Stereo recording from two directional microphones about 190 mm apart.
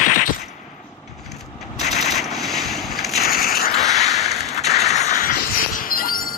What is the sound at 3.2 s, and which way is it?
Mechanisms, 50° left (ahead or behind).